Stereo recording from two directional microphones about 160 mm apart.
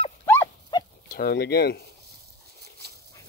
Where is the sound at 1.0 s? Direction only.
65° left (ahead or behind); by 1.8 s 85° left.